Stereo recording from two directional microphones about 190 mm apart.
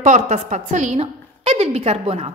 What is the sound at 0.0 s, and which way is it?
A woman's voice, 40° right (ahead or behind).